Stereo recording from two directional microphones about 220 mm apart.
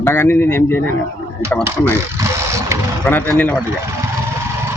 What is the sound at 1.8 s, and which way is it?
Vehicle, 15° right (ahead or behind).